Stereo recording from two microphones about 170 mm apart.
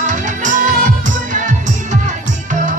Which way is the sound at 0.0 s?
45° right (ahead or behind).